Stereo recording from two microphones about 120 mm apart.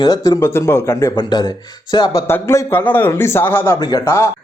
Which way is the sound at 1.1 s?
35° left (ahead or behind).